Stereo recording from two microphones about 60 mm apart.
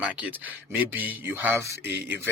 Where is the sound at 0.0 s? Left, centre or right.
Right.